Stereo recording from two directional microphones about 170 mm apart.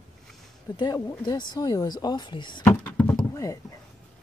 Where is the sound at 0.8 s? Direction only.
25° left (ahead or behind).